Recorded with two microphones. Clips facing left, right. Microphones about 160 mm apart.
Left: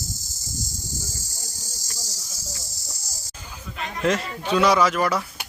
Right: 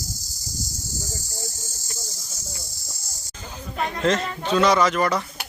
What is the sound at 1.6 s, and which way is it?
Cricket, 15° left (ahead or behind).